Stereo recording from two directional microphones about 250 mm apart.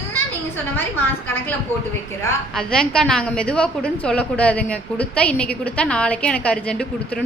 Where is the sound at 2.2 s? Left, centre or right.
Centre.